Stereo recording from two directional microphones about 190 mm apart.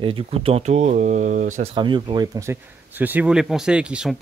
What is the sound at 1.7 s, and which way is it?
Speech, 25° right (ahead or behind).